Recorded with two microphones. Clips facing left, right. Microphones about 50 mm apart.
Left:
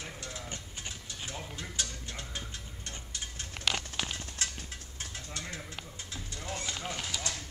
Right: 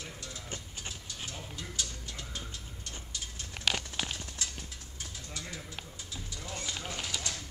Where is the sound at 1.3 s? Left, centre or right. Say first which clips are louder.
Left 3 dB; left.